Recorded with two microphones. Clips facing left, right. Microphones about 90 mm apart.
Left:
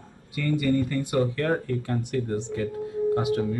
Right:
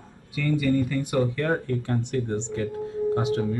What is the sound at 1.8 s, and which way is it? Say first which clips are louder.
Speech: right 1 dB; 25° right (ahead or behind).